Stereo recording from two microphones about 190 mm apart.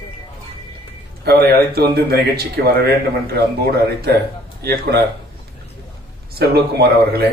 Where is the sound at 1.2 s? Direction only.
55° right (ahead or behind).